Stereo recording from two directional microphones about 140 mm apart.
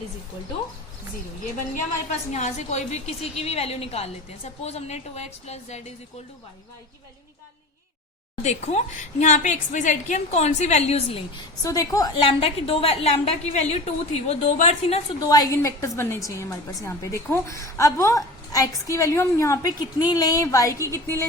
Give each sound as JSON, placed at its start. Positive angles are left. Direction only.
{"t": 2.3, "sound": "a woman's voice", "side_deg": 55}
{"t": 8.4, "sound": "a woman's voice", "side_deg": 50}
{"t": 11.6, "sound": "a woman's voice", "side_deg": 25}
{"t": 15.3, "sound": "a woman's voice", "side_deg": 25}